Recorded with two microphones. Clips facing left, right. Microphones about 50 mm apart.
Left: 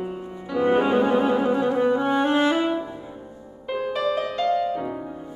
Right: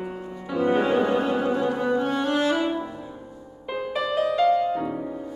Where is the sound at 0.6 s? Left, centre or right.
Centre.